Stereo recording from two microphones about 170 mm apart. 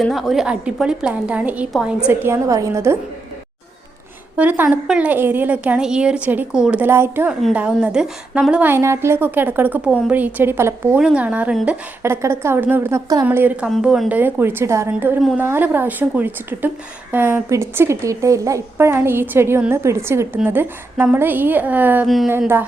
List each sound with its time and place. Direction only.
0.0 s a woman's voice: centre (ahead or behind)
2.0 s a woman's voice: 15° right (ahead or behind)
4.4 s a woman's voice: 10° right (ahead or behind)
15.2 s a woman's voice: centre (ahead or behind)
15.4 s a woman's voice: 15° right (ahead or behind)
22.0 s a woman's voice: centre (ahead or behind)
22.3 s a woman's voice: 10° right (ahead or behind)